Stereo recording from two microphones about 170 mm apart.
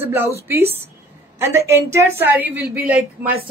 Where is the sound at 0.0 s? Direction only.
15° right (ahead or behind).